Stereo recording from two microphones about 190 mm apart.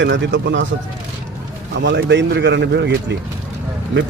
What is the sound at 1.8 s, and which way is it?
A man's voice, 65° right (ahead or behind).